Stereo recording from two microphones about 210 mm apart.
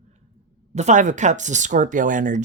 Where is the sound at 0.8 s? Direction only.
35° right (ahead or behind).